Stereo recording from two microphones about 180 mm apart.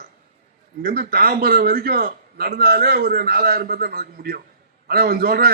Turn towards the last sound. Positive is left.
turn(degrees=-55)  # may be behind; listen again after turning